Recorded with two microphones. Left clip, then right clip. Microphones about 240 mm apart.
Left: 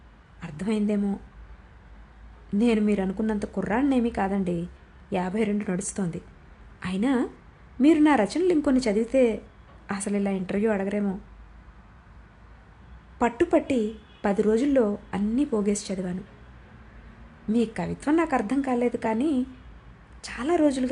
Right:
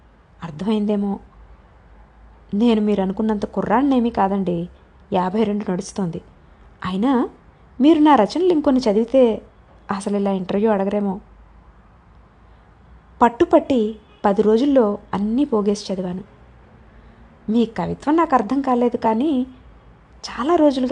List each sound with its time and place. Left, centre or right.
0.3 s a woman's voice: centre
2.6 s a woman's voice: centre
13.1 s a woman's voice: centre
17.5 s a woman's voice: centre